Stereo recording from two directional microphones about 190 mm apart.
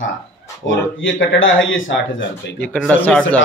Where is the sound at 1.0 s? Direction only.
90° left.